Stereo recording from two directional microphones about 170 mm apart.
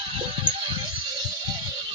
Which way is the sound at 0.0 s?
30° right (ahead or behind).